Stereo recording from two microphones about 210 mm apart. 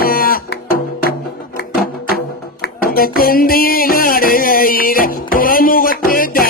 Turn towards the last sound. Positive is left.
turn(degrees=45)  # may be behind; listen again after turning